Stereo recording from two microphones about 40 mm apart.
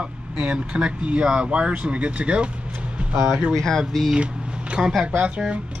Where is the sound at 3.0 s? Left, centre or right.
Right.